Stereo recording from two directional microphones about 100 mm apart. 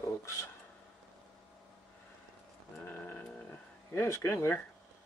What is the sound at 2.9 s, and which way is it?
Sheep, 15° left (ahead or behind).